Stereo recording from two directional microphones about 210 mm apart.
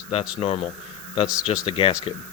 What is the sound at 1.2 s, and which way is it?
Speech, 5° right (ahead or behind).